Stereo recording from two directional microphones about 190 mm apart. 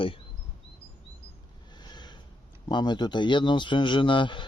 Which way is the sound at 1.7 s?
25° left (ahead or behind).